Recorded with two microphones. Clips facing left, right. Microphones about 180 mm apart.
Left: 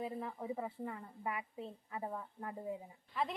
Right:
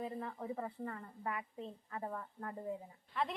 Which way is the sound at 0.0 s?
5° left (ahead or behind).